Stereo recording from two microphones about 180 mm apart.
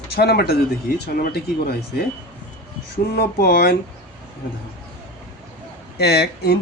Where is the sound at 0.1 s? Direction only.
60° left (ahead or behind).